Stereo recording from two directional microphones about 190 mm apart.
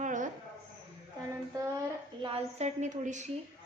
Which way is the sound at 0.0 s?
40° right (ahead or behind).